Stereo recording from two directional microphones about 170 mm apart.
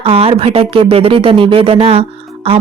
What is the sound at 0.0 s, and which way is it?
Speech, 35° right (ahead or behind).